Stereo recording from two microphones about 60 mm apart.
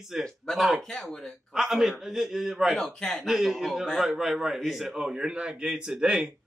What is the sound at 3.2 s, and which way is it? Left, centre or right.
Speech, centre.